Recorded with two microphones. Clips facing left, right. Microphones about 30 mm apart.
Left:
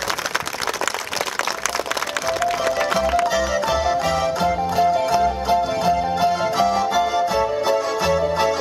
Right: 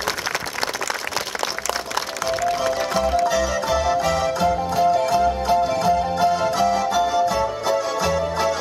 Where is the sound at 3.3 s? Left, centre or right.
Centre.